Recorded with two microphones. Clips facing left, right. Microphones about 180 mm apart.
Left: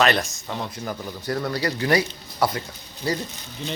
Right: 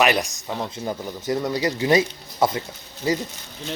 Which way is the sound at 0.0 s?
15° right (ahead or behind).